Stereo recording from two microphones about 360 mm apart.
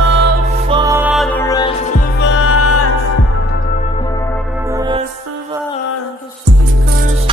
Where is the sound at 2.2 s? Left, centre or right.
Left.